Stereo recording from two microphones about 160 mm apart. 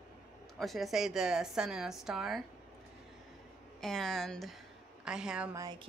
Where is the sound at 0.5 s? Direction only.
Centre (ahead or behind).